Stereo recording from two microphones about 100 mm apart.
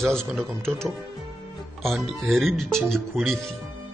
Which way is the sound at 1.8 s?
Centre (ahead or behind).